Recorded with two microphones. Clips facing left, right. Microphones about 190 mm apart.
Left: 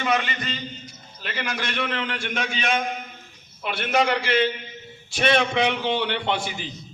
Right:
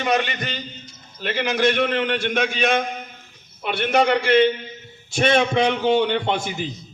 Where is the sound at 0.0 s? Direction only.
45° right (ahead or behind).